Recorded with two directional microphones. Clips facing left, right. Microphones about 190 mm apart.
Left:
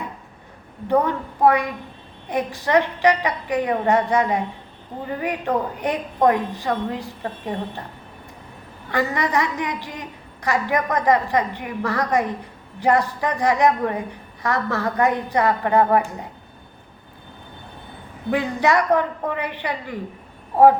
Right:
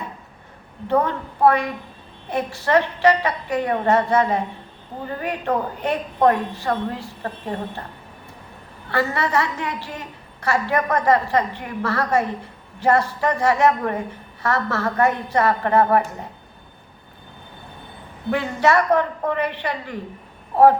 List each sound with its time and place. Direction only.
0.9 s a woman's voice: 15° left (ahead or behind)
8.9 s a woman's voice: 15° left (ahead or behind)
18.3 s a woman's voice: 15° left (ahead or behind)